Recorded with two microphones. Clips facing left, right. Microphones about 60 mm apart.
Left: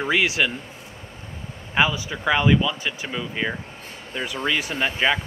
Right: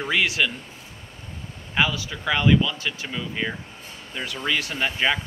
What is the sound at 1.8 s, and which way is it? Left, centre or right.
Speech, centre.